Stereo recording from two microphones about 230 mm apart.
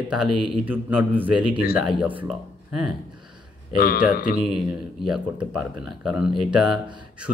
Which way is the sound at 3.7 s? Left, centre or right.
Left.